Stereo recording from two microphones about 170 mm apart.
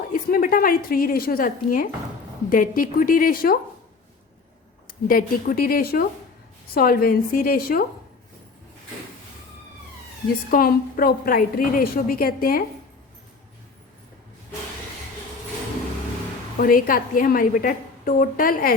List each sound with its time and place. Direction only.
0.1 s a woman's voice: 55° left (ahead or behind)
4.9 s a woman's voice: 55° left (ahead or behind)
10.5 s a woman's voice: 60° left (ahead or behind)
16.6 s a woman's voice: 55° left (ahead or behind)